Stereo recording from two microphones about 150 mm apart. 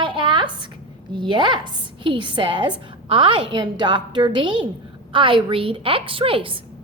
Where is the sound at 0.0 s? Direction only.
35° right (ahead or behind).